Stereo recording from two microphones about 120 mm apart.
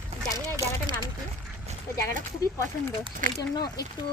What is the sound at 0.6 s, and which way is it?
Speech, 65° right (ahead or behind).